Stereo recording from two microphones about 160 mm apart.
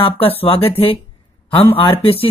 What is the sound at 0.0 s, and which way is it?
Speech, 35° left (ahead or behind).